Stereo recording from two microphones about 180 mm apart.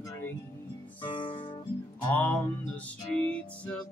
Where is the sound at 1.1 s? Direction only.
25° left (ahead or behind).